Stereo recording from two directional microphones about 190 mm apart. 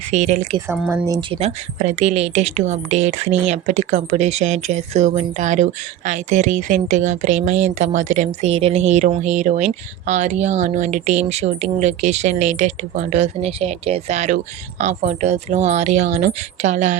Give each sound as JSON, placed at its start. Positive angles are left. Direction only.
{"t": 0.1, "sound": "speech", "side_deg": -40}
{"t": 0.7, "sound": "speech", "side_deg": -10}
{"t": 1.4, "sound": "speech", "side_deg": -35}